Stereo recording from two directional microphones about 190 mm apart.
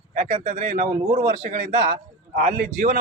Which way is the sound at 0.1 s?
40° right (ahead or behind).